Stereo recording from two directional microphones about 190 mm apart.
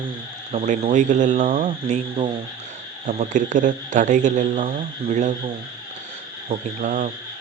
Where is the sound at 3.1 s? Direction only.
40° right (ahead or behind).